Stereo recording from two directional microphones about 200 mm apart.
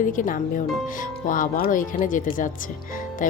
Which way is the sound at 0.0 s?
40° left (ahead or behind).